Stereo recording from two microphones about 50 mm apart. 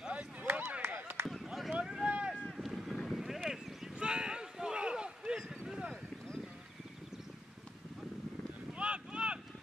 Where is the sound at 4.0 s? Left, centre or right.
Centre.